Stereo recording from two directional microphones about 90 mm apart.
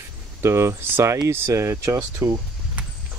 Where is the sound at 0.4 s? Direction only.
30° right (ahead or behind).